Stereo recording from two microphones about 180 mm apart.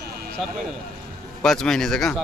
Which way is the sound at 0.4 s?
Centre (ahead or behind).